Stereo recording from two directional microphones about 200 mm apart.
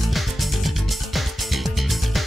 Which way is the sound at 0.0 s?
Centre (ahead or behind).